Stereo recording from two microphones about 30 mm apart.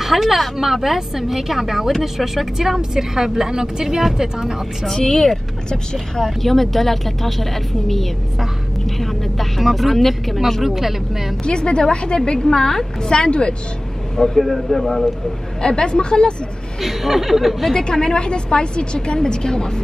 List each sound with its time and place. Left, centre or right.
0.0 s a woman's voice: centre
4.8 s speech: centre
10.6 s a woman's voice: centre
11.4 s a woman's voice: left
14.1 s speech: centre
15.6 s a woman's voice: left
16.8 s speech: centre
17.7 s a woman's voice: left